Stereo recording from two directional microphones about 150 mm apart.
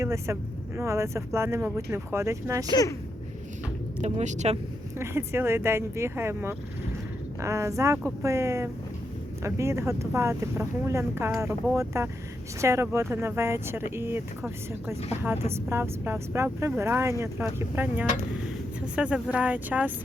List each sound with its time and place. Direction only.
0.0 s speech: 20° right (ahead or behind)
2.6 s speech: 25° left (ahead or behind)
4.0 s speech: 50° right (ahead or behind)
4.9 s speech: 15° right (ahead or behind)